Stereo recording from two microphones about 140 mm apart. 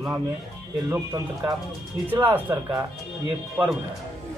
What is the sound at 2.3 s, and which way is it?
Speech, 20° right (ahead or behind).